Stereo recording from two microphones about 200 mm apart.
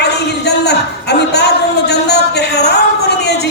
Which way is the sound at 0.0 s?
55° left (ahead or behind).